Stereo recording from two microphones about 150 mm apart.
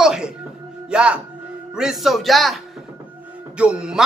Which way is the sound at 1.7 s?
5° right (ahead or behind).